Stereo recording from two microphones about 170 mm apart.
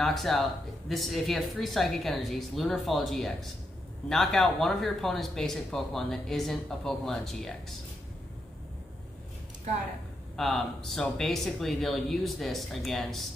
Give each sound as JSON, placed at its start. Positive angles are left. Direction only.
{"t": 0.0, "sound": "speech", "side_deg": 0}
{"t": 10.3, "sound": "speech", "side_deg": 0}